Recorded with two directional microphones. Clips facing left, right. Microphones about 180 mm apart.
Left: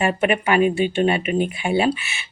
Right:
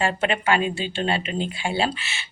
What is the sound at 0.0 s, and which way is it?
Speech, 20° left (ahead or behind).